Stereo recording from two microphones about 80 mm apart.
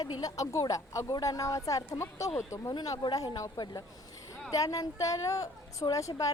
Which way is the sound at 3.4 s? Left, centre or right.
Left.